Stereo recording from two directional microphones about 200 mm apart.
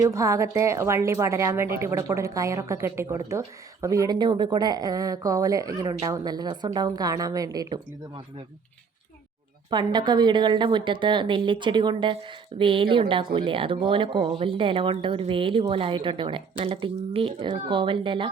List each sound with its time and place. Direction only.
0.0 s a woman's voice: 15° right (ahead or behind)
9.6 s speech: 20° right (ahead or behind)